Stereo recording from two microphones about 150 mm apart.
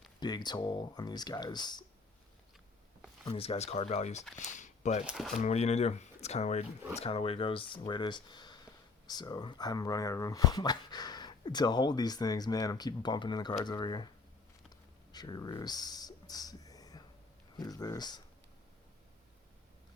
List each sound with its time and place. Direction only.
0.2 s speech: 30° left (ahead or behind)
3.2 s speech: 40° left (ahead or behind)
5.0 s speech: centre (ahead or behind)
5.4 s speech: 45° left (ahead or behind); by 14.1 s 30° left (ahead or behind)
15.1 s speech: 25° left (ahead or behind)